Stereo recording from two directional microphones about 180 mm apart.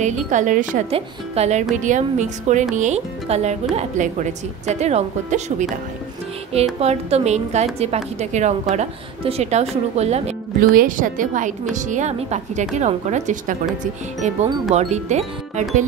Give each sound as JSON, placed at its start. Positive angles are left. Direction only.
{"t": 0.0, "sound": "a woman's voice", "side_deg": -40}
{"t": 6.8, "sound": "a woman's voice", "side_deg": -35}
{"t": 10.8, "sound": "a woman's voice", "side_deg": -45}